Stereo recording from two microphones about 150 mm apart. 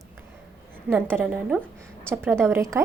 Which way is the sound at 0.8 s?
15° right (ahead or behind).